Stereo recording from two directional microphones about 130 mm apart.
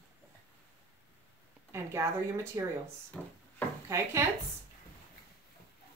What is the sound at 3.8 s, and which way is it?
Speech, 20° right (ahead or behind).